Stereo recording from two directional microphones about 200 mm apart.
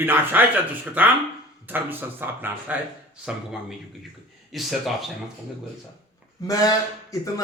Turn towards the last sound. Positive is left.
turn(degrees=15)  # may be behind; listen again after turning